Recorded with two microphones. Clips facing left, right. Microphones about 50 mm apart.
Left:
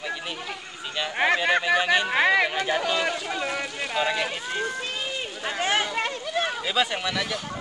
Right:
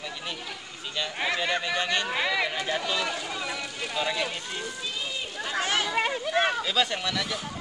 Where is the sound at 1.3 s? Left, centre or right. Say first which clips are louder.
Left 6 dB; left.